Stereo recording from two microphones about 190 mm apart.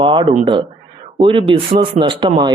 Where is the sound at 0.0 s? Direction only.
25° right (ahead or behind).